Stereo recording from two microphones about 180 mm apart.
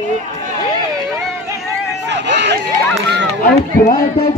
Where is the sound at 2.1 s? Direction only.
75° right (ahead or behind).